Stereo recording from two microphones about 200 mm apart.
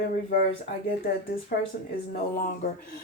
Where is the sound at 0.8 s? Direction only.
45° left (ahead or behind).